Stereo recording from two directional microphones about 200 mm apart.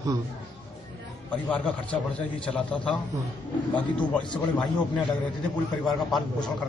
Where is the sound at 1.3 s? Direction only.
5° left (ahead or behind).